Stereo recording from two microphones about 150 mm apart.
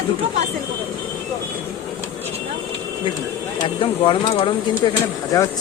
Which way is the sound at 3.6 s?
35° left (ahead or behind).